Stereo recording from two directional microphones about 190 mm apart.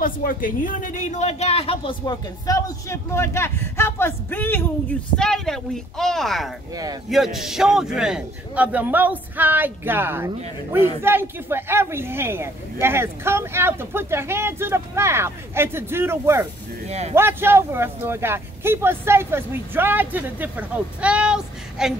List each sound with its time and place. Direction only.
0.0 s a man's voice: 45° left (ahead or behind); by 16.4 s 15° right (ahead or behind)
16.8 s speech: 35° right (ahead or behind)
17.1 s a man's voice: 10° right (ahead or behind)